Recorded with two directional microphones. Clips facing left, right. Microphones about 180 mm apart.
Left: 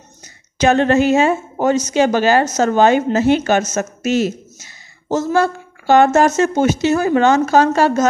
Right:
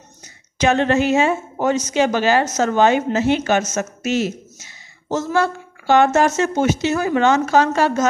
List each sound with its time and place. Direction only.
0.6 s a woman's voice: 45° left (ahead or behind)